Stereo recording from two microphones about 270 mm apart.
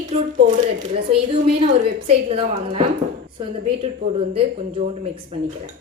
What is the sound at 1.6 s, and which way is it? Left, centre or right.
A woman's voice, right.